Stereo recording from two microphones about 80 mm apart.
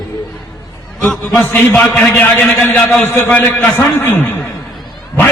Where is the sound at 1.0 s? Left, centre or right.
Left.